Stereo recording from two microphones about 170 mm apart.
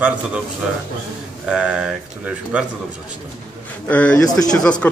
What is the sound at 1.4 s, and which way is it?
Speech, 5° right (ahead or behind).